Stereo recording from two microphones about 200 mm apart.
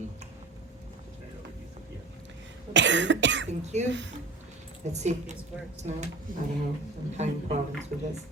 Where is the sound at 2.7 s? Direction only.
65° right (ahead or behind).